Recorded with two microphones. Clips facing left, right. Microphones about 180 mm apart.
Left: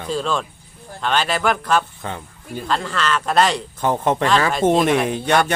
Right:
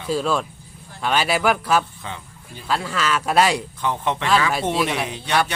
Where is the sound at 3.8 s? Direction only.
45° left (ahead or behind).